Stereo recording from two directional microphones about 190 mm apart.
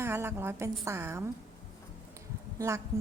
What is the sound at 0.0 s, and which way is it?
A woman's voice, 15° right (ahead or behind).